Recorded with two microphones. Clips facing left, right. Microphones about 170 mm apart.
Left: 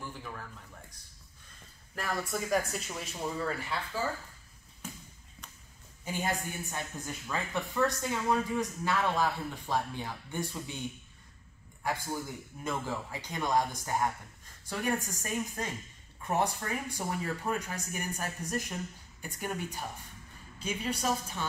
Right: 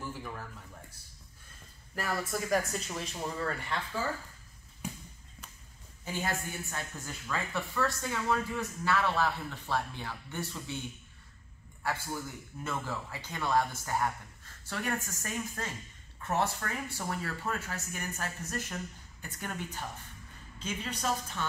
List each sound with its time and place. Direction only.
0.0 s a sound: 5° right (ahead or behind)
2.0 s speech: centre (ahead or behind)
6.1 s a woman's voice: 15° left (ahead or behind)
11.8 s a man's voice: 15° left (ahead or behind)